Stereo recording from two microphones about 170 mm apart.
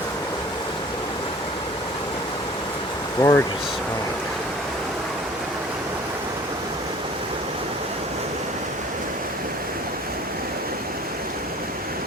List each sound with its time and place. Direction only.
3.2 s speech: 20° left (ahead or behind)